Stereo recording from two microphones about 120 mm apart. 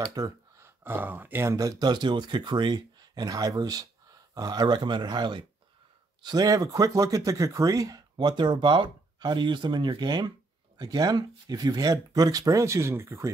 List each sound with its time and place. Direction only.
0.1 s speech: 25° right (ahead or behind)